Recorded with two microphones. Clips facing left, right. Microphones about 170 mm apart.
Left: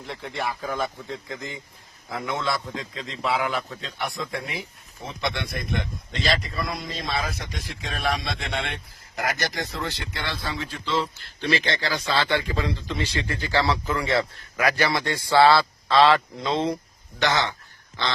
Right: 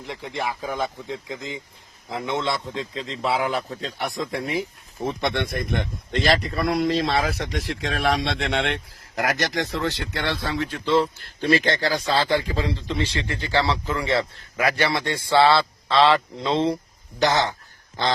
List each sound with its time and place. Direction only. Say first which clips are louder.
0.0 s a man's voice: right 1 dB; 15° right (ahead or behind); by 4.6 s 35° right (ahead or behind)
5.0 s speech: right 5 dB; 50° right (ahead or behind); by 16.7 s 30° right (ahead or behind)
17.2 s a man's voice: right 3 dB; 40° right (ahead or behind)